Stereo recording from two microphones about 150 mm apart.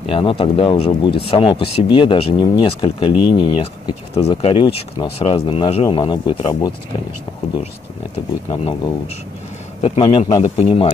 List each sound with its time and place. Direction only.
0.1 s speech: 35° left (ahead or behind)
4.1 s speech: 45° left (ahead or behind)
9.8 s speech: 40° left (ahead or behind)